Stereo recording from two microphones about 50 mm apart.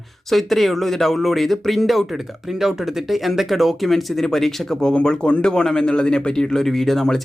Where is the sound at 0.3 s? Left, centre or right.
Centre.